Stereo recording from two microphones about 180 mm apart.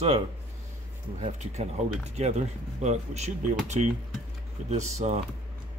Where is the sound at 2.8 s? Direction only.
40° right (ahead or behind).